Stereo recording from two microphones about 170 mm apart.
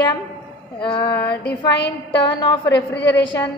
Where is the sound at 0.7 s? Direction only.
30° left (ahead or behind).